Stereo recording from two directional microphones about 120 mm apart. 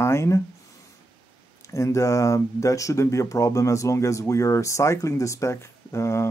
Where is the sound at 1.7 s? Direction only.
25° left (ahead or behind).